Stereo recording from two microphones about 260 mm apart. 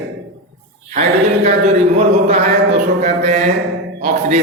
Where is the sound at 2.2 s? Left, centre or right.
Right.